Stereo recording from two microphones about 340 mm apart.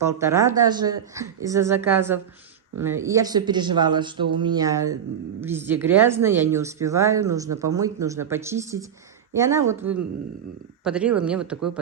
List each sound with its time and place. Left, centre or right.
0.0 s a woman's voice: centre